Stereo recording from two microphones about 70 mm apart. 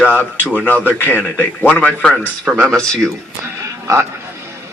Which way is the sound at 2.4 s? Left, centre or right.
Centre.